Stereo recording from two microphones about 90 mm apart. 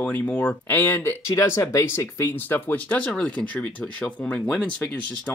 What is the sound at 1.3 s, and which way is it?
Speech, 30° left (ahead or behind).